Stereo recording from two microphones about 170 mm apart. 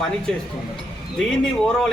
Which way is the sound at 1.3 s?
5° left (ahead or behind).